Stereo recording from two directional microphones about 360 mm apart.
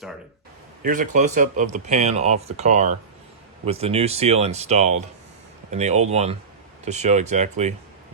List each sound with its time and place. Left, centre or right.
0.8 s speech: right